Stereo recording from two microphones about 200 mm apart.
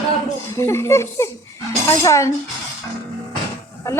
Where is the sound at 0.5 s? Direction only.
15° left (ahead or behind).